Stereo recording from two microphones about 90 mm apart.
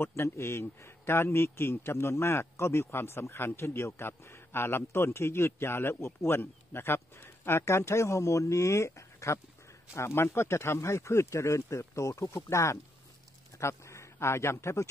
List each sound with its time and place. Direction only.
0.0 s a man's voice: 30° left (ahead or behind)